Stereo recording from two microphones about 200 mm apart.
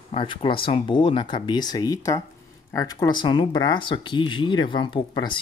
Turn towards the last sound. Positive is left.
turn(degrees=25)  # may be behind; listen again after turning